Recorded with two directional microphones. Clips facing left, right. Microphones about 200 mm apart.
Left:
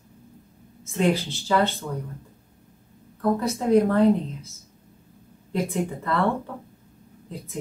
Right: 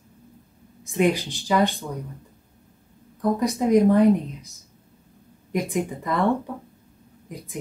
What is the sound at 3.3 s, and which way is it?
A woman's voice, 15° right (ahead or behind).